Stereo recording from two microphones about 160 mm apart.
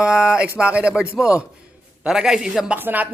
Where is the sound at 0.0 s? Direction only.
5° right (ahead or behind).